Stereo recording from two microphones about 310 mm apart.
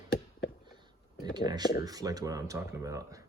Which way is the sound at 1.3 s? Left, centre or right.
Centre.